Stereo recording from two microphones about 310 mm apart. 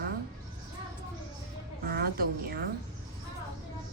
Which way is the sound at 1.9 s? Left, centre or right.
Right.